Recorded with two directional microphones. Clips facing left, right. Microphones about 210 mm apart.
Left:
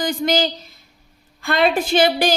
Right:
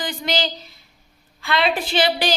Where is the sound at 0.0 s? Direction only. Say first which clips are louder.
Left 5 dB; 45° left (ahead or behind).